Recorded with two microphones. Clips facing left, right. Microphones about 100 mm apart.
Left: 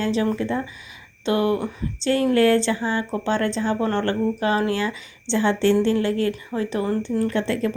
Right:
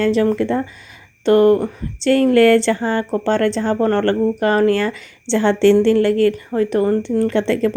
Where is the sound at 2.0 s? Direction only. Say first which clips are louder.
Right 6 dB; 70° right (ahead or behind).